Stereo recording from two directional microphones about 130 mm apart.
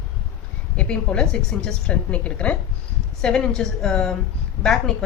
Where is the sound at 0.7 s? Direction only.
5° left (ahead or behind).